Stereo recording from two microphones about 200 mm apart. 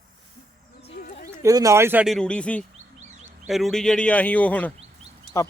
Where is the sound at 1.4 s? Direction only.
15° right (ahead or behind).